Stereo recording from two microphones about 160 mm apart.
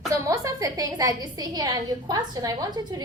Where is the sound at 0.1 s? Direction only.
20° right (ahead or behind).